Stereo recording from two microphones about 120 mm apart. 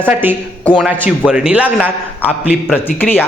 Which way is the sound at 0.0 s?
15° right (ahead or behind).